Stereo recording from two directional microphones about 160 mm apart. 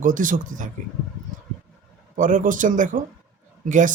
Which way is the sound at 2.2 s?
55° right (ahead or behind).